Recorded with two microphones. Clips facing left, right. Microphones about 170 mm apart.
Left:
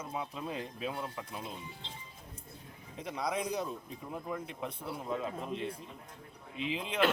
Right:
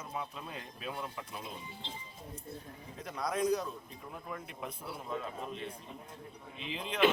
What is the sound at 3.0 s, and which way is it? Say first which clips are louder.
Speech: right 1 dB; 20° left (ahead or behind).